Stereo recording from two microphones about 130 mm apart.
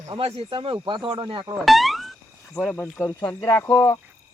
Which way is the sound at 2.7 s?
15° left (ahead or behind).